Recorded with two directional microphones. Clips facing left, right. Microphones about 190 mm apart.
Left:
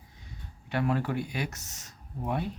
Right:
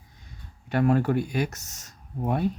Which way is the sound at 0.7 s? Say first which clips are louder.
Right 7 dB; 45° right (ahead or behind).